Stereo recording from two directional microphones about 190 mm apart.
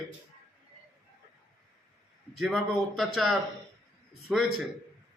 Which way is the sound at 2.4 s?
Centre (ahead or behind).